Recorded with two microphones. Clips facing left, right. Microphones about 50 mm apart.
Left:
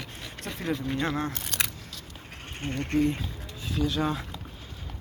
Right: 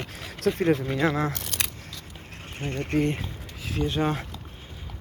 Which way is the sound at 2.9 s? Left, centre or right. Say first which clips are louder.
Even; right.